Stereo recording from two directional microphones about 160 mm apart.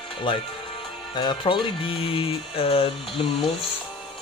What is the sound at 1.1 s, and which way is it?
Music, 30° left (ahead or behind).